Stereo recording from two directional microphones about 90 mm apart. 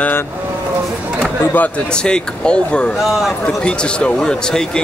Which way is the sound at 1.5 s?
20° left (ahead or behind).